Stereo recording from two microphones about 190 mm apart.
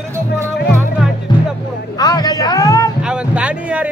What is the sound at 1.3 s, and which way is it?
Music, 25° left (ahead or behind).